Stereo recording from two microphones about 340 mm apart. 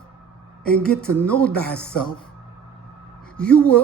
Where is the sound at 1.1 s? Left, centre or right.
Centre.